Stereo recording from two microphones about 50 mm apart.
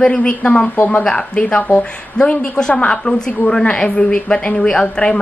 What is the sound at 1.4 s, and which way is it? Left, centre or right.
A woman's voice, left.